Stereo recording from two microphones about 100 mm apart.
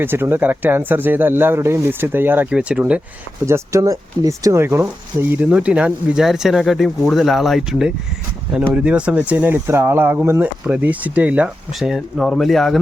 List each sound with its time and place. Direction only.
0.0 s speech: 20° right (ahead or behind)
3.4 s speech: 30° right (ahead or behind)
5.3 s speech: 15° right (ahead or behind)
11.8 s speech: centre (ahead or behind)